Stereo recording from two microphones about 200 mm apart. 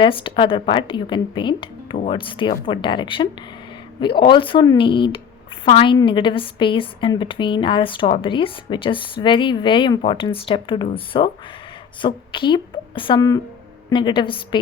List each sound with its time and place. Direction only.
0.0 s a woman's voice: 25° left (ahead or behind)